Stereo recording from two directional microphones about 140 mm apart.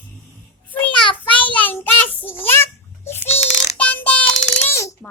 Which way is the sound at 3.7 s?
10° left (ahead or behind).